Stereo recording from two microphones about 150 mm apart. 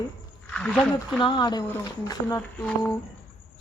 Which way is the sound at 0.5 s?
5° left (ahead or behind).